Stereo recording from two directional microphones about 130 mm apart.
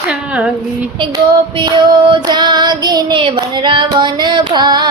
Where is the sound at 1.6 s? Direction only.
35° right (ahead or behind).